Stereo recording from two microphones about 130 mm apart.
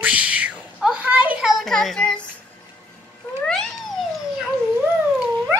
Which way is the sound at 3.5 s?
5° left (ahead or behind).